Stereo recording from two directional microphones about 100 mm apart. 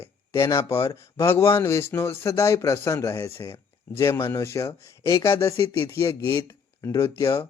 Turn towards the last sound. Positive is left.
turn(degrees=30)  # may be behind; listen again after turning